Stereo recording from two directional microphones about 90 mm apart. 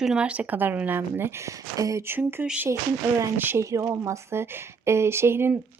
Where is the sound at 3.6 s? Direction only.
35° right (ahead or behind).